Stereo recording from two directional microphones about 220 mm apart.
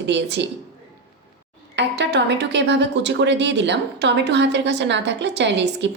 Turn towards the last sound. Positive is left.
turn(degrees=-55)  # may be behind; listen again after turning